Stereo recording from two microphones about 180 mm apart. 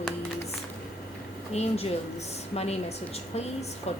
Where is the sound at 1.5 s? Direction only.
35° left (ahead or behind).